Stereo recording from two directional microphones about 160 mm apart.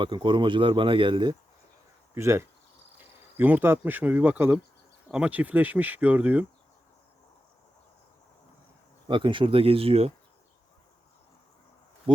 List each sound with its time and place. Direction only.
0.0 s speech: 30° right (ahead or behind)
2.1 s speech: 15° right (ahead or behind)
9.0 s speech: 30° right (ahead or behind)
12.1 s speech: 30° right (ahead or behind)